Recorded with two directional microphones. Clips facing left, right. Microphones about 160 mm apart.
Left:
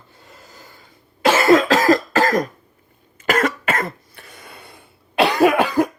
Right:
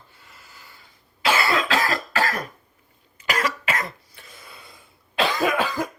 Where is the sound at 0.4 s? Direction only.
45° left (ahead or behind).